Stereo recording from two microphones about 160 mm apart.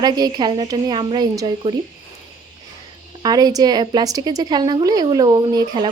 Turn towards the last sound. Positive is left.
turn(degrees=-30)  # may be behind; listen again after turning